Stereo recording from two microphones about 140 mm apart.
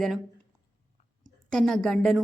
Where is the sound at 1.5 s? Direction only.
5° left (ahead or behind).